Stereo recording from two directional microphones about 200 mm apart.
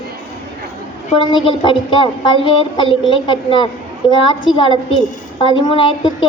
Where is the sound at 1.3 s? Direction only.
25° left (ahead or behind).